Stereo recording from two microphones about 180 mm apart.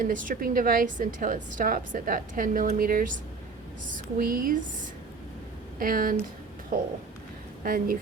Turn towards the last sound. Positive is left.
turn(degrees=-50)  # may be behind; listen again after turning